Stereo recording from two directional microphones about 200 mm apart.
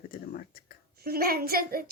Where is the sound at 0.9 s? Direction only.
50° right (ahead or behind).